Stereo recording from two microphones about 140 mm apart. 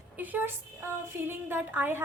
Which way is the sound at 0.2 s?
10° right (ahead or behind).